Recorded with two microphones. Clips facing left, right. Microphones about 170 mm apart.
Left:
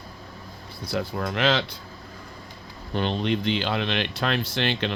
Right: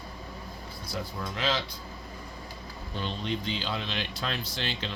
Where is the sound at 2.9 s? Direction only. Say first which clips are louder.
Left 8 dB; 70° left (ahead or behind).